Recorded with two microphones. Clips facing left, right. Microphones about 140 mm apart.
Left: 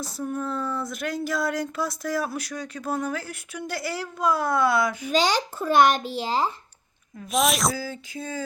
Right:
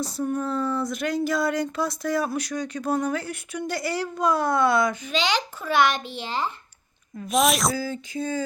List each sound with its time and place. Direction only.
0.0 s speech: centre (ahead or behind)
5.1 s a child's voice: 40° left (ahead or behind)
7.2 s speech: centre (ahead or behind)